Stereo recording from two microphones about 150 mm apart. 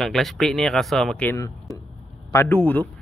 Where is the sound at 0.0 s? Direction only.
Centre (ahead or behind).